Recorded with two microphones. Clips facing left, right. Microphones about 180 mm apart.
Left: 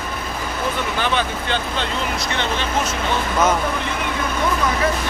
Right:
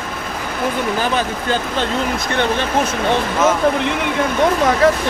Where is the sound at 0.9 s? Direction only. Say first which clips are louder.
Right 2 dB; 40° right (ahead or behind).